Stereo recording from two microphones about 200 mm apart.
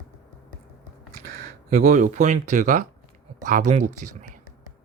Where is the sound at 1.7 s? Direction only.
45° right (ahead or behind).